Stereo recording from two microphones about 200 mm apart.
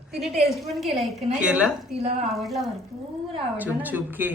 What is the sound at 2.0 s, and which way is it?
Speech, 30° right (ahead or behind).